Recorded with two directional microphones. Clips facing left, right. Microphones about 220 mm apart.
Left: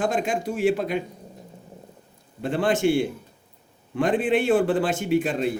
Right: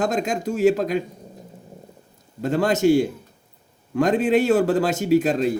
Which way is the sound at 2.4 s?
40° right (ahead or behind).